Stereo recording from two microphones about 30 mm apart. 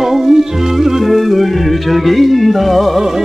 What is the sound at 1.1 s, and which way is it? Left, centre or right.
Music, centre.